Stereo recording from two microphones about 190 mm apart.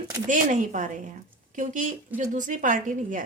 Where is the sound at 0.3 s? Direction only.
40° right (ahead or behind).